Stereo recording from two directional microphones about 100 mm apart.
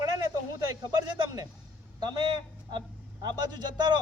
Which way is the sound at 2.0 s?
50° right (ahead or behind).